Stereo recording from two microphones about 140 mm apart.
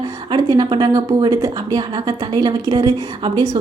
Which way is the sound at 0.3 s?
30° right (ahead or behind).